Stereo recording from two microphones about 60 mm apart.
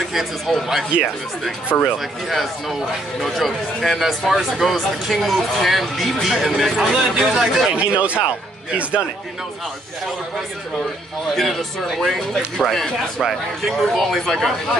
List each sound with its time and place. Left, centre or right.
0.1 s speech: centre
1.7 s speech: left
2.2 s speech: centre
7.7 s speech: right
11.3 s speech: centre